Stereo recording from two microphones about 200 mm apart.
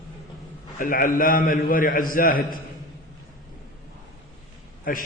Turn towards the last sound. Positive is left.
turn(degrees=45)  # may be behind; listen again after turning